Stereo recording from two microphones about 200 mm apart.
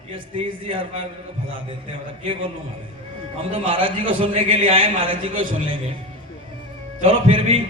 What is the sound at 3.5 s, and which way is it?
A man's voice, 25° right (ahead or behind).